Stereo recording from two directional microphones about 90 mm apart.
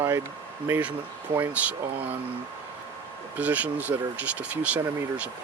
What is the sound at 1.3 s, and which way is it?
Speech, 20° right (ahead or behind).